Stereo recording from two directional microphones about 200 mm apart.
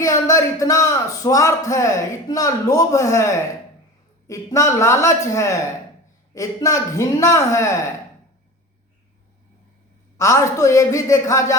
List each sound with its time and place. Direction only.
0.0 s a man's voice: 15° left (ahead or behind)
10.2 s a man's voice: 15° left (ahead or behind)